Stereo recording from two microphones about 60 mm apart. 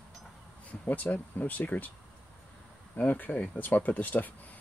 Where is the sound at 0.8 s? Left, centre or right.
Left.